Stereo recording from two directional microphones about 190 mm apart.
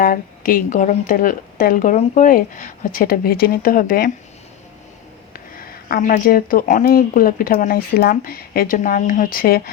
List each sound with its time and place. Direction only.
0.0 s speech: 45° left (ahead or behind)
5.3 s speech: 50° left (ahead or behind)